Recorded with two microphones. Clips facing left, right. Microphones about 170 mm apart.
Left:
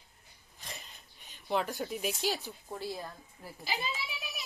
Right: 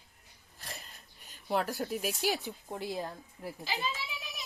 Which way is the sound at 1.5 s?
Centre (ahead or behind).